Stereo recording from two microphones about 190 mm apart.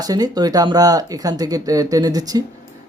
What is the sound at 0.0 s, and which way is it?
Speech, 20° right (ahead or behind).